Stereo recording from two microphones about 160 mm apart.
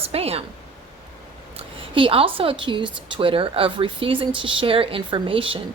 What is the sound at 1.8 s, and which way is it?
A woman's voice, 35° right (ahead or behind).